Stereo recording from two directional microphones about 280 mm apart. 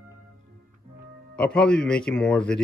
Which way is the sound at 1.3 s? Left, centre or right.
Centre.